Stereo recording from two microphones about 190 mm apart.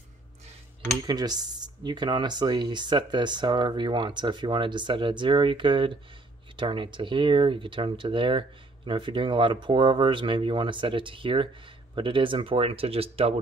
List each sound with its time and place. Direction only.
1.0 s speech: 20° right (ahead or behind)